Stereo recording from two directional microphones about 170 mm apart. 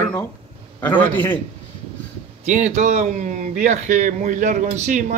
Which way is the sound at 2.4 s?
45° right (ahead or behind).